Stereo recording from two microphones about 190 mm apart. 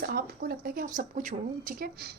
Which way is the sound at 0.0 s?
55° right (ahead or behind).